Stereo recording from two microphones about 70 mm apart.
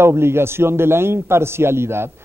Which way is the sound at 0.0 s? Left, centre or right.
Right.